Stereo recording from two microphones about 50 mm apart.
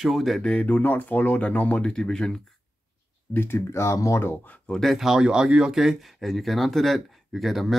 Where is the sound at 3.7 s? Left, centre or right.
Left.